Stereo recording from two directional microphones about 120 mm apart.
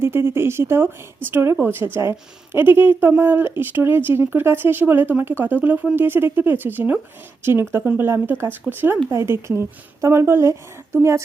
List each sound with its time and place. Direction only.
0.0 s speech: 20° right (ahead or behind)